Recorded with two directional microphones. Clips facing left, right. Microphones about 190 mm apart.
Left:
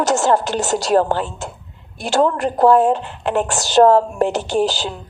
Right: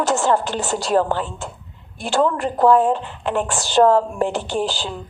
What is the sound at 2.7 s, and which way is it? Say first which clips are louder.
Speech: left 2 dB; 75° left (ahead or behind).